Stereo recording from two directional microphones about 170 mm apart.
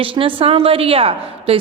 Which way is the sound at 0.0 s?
30° right (ahead or behind).